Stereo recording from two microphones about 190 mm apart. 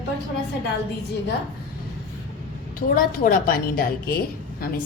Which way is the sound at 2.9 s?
45° left (ahead or behind).